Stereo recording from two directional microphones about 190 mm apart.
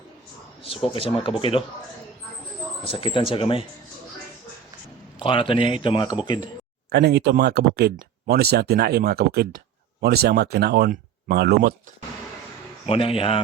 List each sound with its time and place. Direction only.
0.9 s speech: 30° left (ahead or behind)
2.8 s speech: 30° left (ahead or behind)
5.2 s speech: 25° left (ahead or behind)
6.9 s speech: 60° right (ahead or behind)
12.8 s speech: 30° left (ahead or behind)